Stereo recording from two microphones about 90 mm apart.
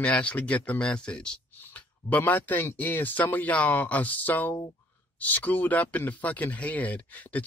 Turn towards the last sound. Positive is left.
turn(degrees=15)  # may be behind; listen again after turning